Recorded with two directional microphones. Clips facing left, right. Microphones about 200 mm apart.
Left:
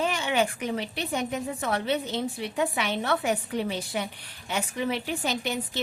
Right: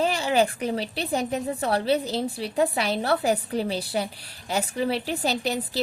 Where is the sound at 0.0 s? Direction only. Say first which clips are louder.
Right 4 dB; 35° right (ahead or behind).